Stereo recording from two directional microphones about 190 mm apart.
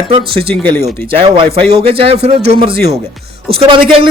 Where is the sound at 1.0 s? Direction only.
30° right (ahead or behind).